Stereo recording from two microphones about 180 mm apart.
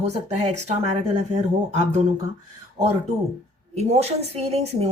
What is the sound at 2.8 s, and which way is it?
Speech, 40° right (ahead or behind).